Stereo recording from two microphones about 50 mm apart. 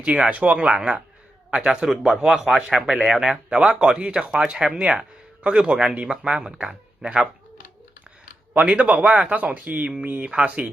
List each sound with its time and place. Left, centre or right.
0.0 s a man's voice: right
8.5 s a man's voice: right